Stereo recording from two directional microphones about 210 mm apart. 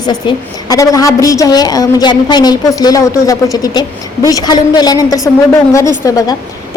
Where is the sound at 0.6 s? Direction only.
15° left (ahead or behind).